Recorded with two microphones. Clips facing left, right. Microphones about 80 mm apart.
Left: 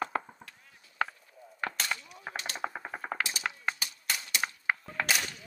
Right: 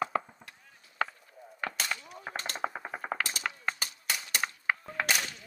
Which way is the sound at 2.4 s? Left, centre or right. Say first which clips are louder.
Right 1 dB; right.